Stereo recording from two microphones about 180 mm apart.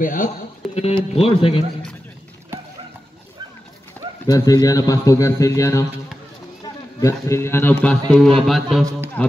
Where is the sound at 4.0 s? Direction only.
10° left (ahead or behind).